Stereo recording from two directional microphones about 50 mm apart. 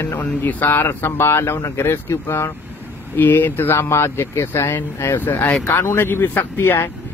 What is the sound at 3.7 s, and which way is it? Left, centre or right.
Speech, left.